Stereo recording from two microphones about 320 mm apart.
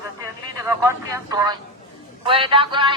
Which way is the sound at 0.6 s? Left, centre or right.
Centre.